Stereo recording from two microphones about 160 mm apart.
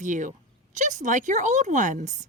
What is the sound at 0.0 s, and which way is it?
A woman's voice, 55° right (ahead or behind).